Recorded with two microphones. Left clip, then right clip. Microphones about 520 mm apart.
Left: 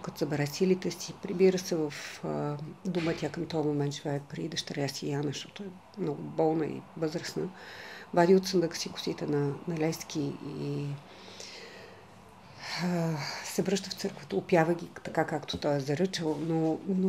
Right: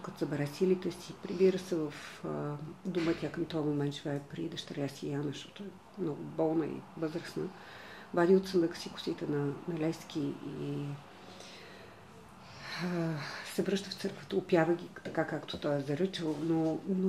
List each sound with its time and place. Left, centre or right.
0.0 s speech: left
12.6 s speech: left